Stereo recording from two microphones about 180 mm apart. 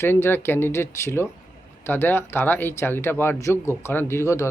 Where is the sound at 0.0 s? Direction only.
10° left (ahead or behind).